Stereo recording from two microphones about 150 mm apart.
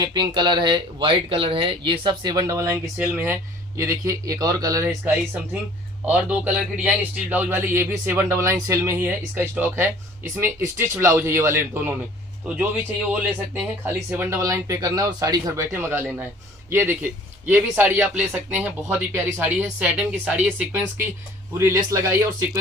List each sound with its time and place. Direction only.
0.0 s speech: 30° right (ahead or behind); by 11.9 s 15° right (ahead or behind)
14.1 s speech: 15° right (ahead or behind)